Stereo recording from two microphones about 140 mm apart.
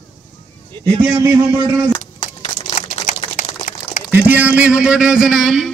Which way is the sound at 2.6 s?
55° left (ahead or behind).